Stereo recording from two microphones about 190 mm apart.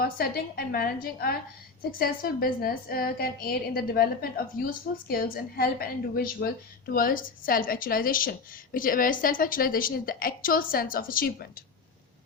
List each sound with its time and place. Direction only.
0.0 s a woman's voice: 50° left (ahead or behind)